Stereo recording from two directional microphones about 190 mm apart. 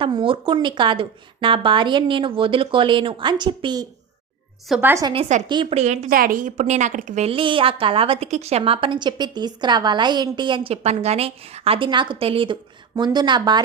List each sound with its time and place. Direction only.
0.0 s a woman's voice: 25° right (ahead or behind)
4.7 s a woman's voice: 10° right (ahead or behind)
5.5 s a woman's voice: 25° right (ahead or behind)
5.8 s a woman's voice: 35° right (ahead or behind)